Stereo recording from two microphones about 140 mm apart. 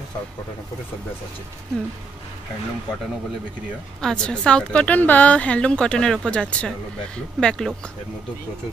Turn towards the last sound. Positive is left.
turn(degrees=5)  # may be behind; listen again after turning